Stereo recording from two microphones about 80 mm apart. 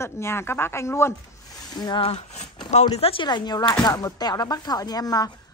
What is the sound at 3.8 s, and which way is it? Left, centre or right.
Speech, left.